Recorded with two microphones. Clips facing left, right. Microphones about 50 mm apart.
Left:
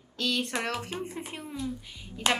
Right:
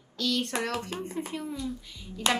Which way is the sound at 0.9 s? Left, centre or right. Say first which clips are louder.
Right 2 dB; left.